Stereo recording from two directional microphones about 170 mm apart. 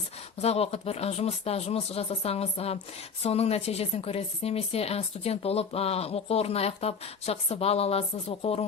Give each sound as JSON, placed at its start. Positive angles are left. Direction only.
{"t": 0.4, "sound": "speech", "side_deg": 35}